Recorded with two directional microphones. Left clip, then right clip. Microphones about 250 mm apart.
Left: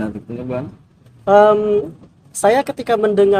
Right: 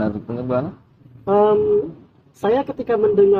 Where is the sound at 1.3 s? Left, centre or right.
Left.